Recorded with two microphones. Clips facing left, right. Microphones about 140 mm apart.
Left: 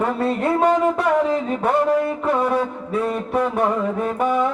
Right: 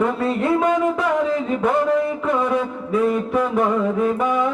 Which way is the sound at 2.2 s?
30° left (ahead or behind).